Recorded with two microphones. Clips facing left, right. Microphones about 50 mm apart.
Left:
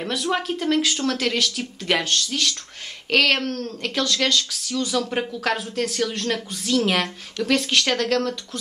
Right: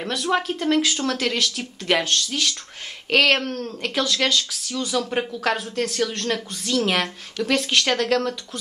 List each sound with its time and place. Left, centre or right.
0.0 s speech: centre